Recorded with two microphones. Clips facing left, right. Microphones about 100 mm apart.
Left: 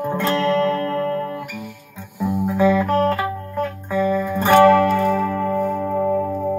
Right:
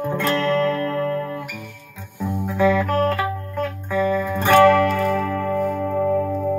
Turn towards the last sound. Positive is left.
turn(degrees=10)  # may be behind; listen again after turning